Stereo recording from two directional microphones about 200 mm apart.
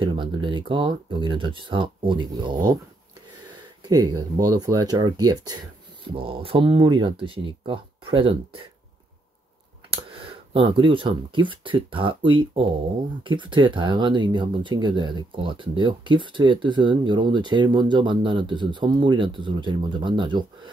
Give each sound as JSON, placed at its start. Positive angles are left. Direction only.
{"t": 0.0, "sound": "speech", "side_deg": -25}
{"t": 3.8, "sound": "speech", "side_deg": -20}
{"t": 9.8, "sound": "speech", "side_deg": -25}